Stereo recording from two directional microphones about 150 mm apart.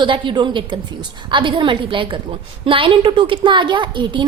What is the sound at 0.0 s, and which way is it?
A woman's voice, 35° right (ahead or behind).